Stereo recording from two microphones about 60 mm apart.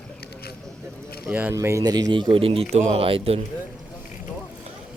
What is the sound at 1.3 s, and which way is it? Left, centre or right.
Speech, right.